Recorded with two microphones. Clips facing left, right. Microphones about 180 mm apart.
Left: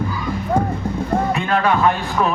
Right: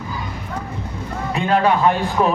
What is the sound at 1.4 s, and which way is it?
Speech, 20° right (ahead or behind).